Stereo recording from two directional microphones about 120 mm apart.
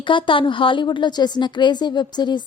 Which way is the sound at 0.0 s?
45° left (ahead or behind).